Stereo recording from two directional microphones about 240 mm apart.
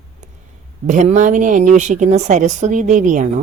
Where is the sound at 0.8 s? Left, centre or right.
Right.